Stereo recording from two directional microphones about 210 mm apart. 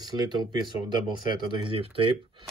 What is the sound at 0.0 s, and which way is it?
Speech, 20° right (ahead or behind).